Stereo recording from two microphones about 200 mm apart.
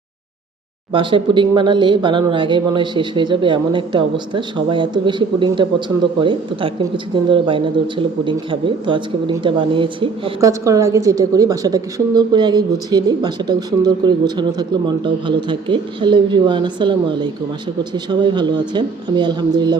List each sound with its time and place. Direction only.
0.9 s speech: 25° right (ahead or behind)
10.6 s speech: 15° right (ahead or behind)